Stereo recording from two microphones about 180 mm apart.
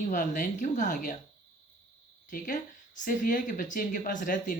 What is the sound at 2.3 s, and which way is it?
Speech, 45° left (ahead or behind).